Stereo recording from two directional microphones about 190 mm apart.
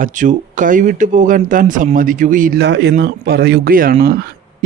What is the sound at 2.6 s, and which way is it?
Speech, 65° right (ahead or behind).